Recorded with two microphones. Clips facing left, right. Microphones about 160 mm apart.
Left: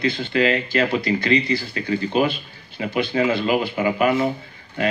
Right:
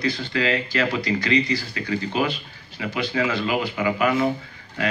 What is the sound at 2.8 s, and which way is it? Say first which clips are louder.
Speech: left 3 dB; 35° left (ahead or behind).